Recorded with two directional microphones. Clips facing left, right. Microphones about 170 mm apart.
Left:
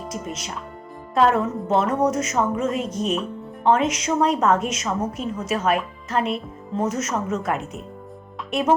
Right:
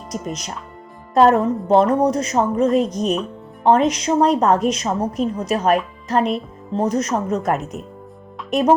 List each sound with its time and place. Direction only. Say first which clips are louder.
0.1 s a woman's voice: right 7 dB; 40° right (ahead or behind)